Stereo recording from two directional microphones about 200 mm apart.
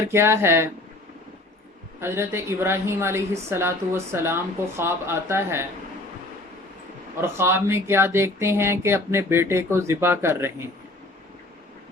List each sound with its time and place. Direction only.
0.1 s a woman's voice: 10° right (ahead or behind)
2.0 s a woman's voice: 15° right (ahead or behind)
7.2 s a woman's voice: 10° right (ahead or behind)